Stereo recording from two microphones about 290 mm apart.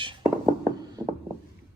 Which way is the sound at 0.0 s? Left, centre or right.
Centre.